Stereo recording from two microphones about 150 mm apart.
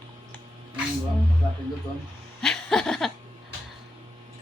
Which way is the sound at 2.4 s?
5° left (ahead or behind).